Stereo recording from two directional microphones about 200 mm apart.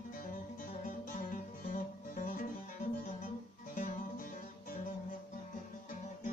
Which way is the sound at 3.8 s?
45° left (ahead or behind).